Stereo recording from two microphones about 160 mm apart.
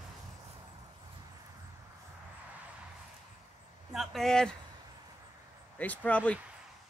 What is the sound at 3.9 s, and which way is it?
Speech, centre (ahead or behind).